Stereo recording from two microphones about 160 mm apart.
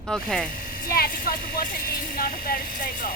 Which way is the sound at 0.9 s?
65° left (ahead or behind).